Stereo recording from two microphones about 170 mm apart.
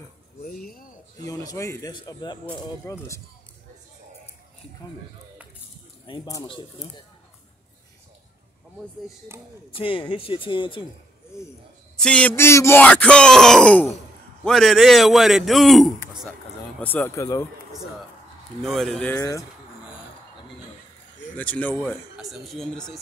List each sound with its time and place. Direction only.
0.7 s speech: 55° left (ahead or behind)
1.2 s a man's voice: 20° left (ahead or behind)
6.0 s a man's voice: 25° left (ahead or behind)
9.7 s speech: 30° left (ahead or behind)
12.0 s a man's voice: 5° left (ahead or behind)
16.8 s speech: 10° left (ahead or behind)
18.6 s a man's voice: centre (ahead or behind)
19.1 s a man's voice: 20° left (ahead or behind)
21.4 s speech: 10° left (ahead or behind)
22.1 s a man's voice: centre (ahead or behind)